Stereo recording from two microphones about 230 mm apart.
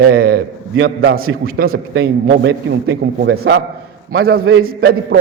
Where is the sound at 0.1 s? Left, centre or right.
Right.